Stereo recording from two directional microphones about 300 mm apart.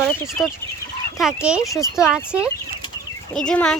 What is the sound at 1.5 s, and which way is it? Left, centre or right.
Speech, centre.